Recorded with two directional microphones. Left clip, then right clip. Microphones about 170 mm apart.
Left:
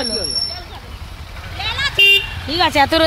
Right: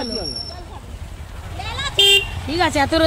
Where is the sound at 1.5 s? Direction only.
20° right (ahead or behind).